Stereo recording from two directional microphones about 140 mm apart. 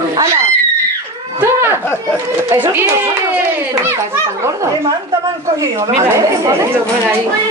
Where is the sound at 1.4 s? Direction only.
20° right (ahead or behind).